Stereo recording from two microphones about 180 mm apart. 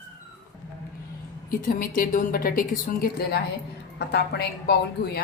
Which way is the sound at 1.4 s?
50° left (ahead or behind).